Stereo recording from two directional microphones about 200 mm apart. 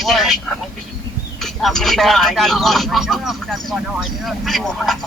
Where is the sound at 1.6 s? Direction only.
Centre (ahead or behind).